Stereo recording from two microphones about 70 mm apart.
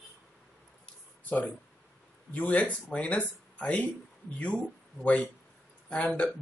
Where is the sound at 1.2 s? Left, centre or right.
Left.